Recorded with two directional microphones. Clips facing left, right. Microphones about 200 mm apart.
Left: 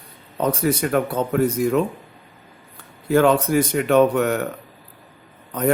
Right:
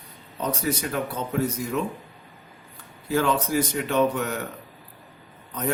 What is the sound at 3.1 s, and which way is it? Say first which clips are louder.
Speech: left 7 dB; 60° left (ahead or behind).